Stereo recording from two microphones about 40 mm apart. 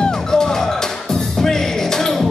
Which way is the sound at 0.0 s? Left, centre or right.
Centre.